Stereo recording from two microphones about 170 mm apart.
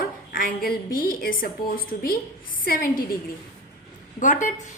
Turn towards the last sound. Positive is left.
turn(degrees=45)  # may be behind; listen again after turning